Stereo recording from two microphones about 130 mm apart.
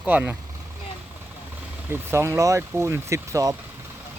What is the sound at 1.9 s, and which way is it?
Speech, 20° right (ahead or behind).